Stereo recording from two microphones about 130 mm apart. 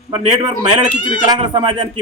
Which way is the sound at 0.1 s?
35° right (ahead or behind).